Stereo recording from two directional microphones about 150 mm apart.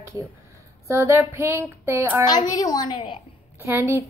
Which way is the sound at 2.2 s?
25° left (ahead or behind).